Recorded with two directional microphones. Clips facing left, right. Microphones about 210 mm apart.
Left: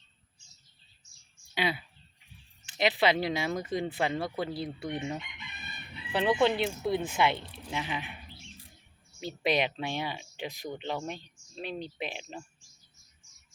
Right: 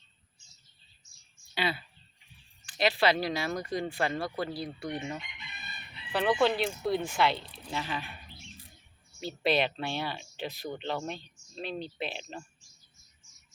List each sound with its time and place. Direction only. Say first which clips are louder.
1.5 s speech: left 1 dB; 15° left (ahead or behind)
9.2 s speech: right 1 dB; 15° left (ahead or behind)